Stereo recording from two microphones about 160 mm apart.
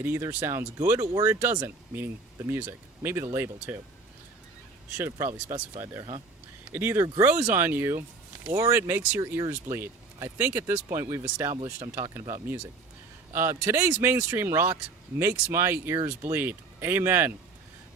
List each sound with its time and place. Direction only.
0.0 s speech: 15° right (ahead or behind)
5.8 s speech: 15° right (ahead or behind)